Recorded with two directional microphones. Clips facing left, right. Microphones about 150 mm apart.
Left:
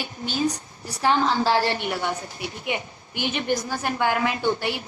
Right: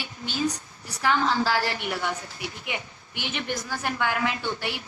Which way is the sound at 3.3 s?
35° left (ahead or behind).